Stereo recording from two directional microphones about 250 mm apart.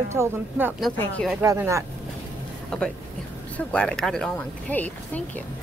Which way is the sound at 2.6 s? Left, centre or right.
Centre.